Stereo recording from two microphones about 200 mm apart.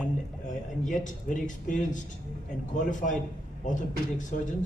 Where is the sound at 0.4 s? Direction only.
40° left (ahead or behind).